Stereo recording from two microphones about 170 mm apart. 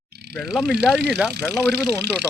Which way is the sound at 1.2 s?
5° right (ahead or behind).